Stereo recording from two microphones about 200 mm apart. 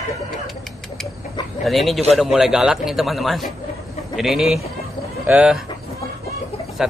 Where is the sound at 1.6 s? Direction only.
Centre (ahead or behind).